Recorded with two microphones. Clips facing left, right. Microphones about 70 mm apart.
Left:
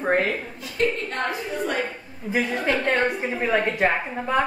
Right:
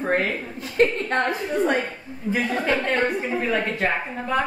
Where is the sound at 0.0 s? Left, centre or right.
Centre.